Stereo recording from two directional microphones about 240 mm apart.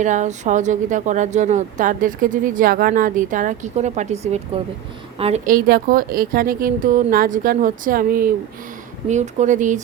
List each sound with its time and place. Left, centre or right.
0.0 s speech: right